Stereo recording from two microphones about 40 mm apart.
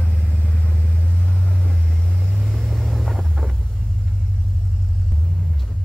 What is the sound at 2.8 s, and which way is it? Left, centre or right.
Vehicle, centre.